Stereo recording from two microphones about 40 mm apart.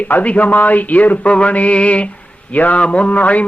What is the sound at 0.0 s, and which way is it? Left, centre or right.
Mantra, left.